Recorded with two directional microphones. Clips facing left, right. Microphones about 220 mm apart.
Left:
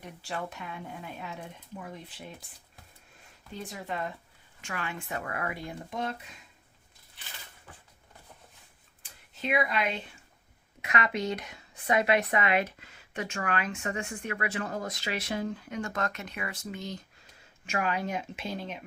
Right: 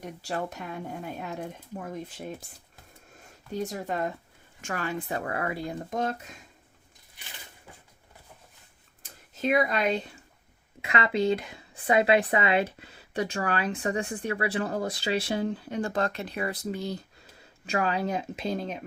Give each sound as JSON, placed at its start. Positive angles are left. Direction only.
{"t": 0.0, "sound": "speech", "side_deg": -40}
{"t": 9.3, "sound": "speech", "side_deg": -40}
{"t": 10.8, "sound": "speech", "side_deg": -25}